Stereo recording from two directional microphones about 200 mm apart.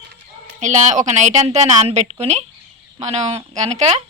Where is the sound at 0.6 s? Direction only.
40° right (ahead or behind).